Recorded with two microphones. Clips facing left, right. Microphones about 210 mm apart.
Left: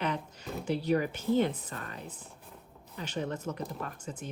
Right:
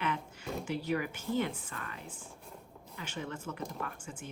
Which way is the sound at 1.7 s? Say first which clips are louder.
Left 3 dB; 35° left (ahead or behind).